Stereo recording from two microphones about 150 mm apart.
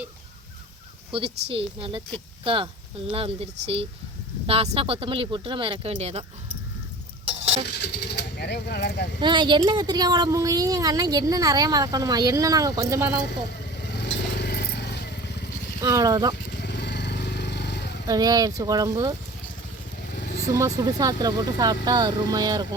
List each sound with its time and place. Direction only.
1.1 s speech: 40° right (ahead or behind)
7.3 s a sound: 45° right (ahead or behind)
8.4 s speech: 90° left
9.2 s speech: 30° right (ahead or behind)
13.9 s motorcycle: 90° left
15.8 s speech: 20° right (ahead or behind)
16.5 s vehicle: 90° left
18.0 s speech: 25° right (ahead or behind)
20.5 s speech: 20° right (ahead or behind)